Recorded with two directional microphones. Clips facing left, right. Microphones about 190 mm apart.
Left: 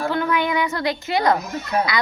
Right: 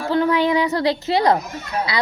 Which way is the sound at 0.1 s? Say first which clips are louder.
Right 9 dB; 30° right (ahead or behind).